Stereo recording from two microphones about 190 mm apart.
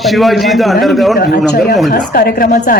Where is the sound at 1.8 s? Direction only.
45° left (ahead or behind).